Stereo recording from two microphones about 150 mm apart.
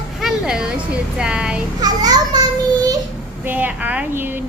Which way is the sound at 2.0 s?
25° right (ahead or behind).